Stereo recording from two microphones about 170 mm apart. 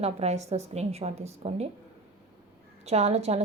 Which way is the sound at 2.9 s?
40° right (ahead or behind).